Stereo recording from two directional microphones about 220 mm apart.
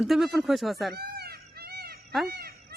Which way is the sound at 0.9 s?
45° right (ahead or behind).